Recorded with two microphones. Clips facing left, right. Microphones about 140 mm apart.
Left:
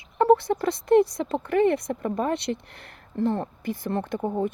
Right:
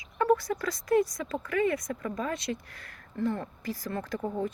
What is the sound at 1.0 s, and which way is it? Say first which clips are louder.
Speech: left 6 dB; 60° left (ahead or behind).